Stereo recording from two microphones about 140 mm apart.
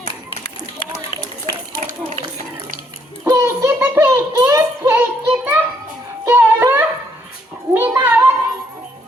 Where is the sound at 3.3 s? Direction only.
25° right (ahead or behind).